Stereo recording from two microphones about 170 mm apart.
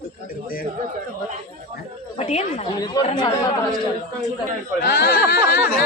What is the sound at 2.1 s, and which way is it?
Speech, 40° left (ahead or behind).